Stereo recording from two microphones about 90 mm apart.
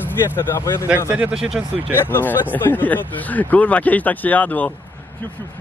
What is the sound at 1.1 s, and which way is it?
Speech, 10° right (ahead or behind).